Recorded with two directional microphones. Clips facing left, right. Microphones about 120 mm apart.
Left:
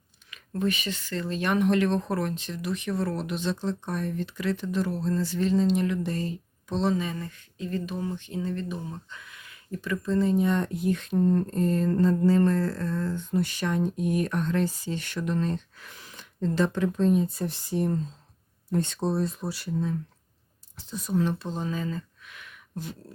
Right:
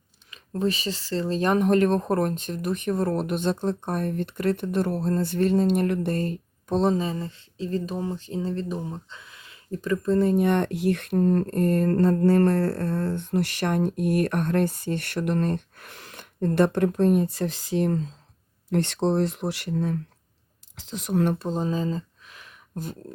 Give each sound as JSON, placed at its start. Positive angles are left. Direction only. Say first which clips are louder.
{"t": 0.3, "sound": "speech", "louder": "right 2 dB", "side_deg": -35}
{"t": 9.8, "sound": "speech", "louder": "right 4 dB", "side_deg": -40}
{"t": 20.7, "sound": "speech", "louder": "right 2 dB", "side_deg": -85}
{"t": 21.4, "sound": "a sound", "louder": "right 5 dB", "side_deg": -35}